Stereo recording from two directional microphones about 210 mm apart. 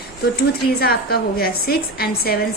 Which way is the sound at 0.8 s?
45° left (ahead or behind).